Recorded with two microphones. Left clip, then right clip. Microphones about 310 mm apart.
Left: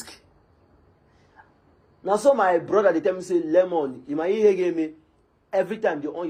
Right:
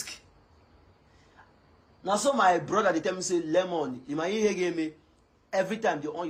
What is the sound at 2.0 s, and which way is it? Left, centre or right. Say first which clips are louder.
A man's voice: left 4 dB; centre.